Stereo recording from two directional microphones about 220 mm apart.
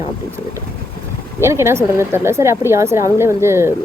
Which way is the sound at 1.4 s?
10° right (ahead or behind).